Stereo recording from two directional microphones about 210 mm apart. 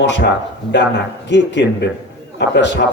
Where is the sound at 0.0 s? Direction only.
55° left (ahead or behind).